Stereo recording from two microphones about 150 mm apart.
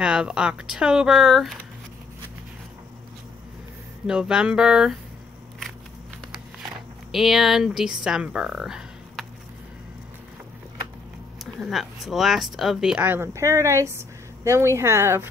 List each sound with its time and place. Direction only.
0.0 s speech: 5° right (ahead or behind)
4.0 s speech: 5° right (ahead or behind)
7.1 s speech: centre (ahead or behind)
11.6 s speech: centre (ahead or behind); by 15.2 s 15° right (ahead or behind)